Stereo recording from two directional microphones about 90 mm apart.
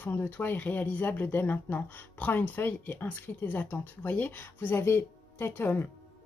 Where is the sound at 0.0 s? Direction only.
20° left (ahead or behind).